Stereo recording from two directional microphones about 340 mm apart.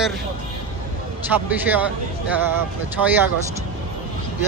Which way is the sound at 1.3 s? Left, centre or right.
Centre.